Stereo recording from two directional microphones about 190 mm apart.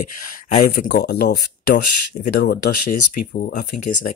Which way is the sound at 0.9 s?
60° left (ahead or behind).